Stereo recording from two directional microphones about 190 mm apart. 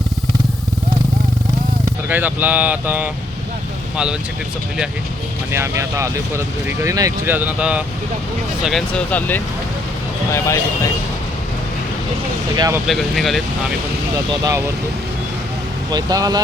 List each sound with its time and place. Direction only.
2.0 s speech: 10° right (ahead or behind)
5.5 s speech: 15° right (ahead or behind); by 10.6 s 15° left (ahead or behind)
12.5 s speech: 20° right (ahead or behind)
12.9 s speech: centre (ahead or behind)
15.9 s speech: 20° right (ahead or behind)